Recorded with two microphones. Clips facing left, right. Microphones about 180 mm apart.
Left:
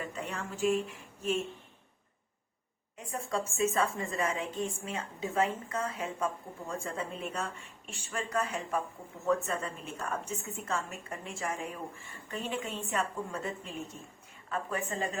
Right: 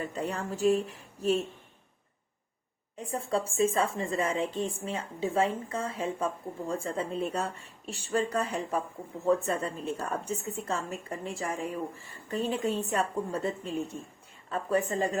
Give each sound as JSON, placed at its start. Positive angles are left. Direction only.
{"t": 0.0, "sound": "speech", "side_deg": -35}
{"t": 3.0, "sound": "a woman's voice", "side_deg": -30}